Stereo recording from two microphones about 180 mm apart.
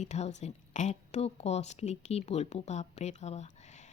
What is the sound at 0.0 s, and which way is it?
A woman's voice, 40° left (ahead or behind).